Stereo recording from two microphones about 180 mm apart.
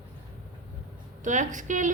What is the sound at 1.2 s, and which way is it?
Speech, 45° right (ahead or behind).